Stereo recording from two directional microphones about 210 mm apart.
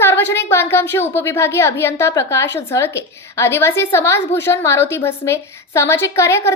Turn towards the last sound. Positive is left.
turn(degrees=15)  # may be behind; listen again after turning